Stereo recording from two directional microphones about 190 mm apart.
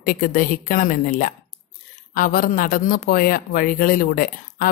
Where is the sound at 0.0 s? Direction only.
50° left (ahead or behind).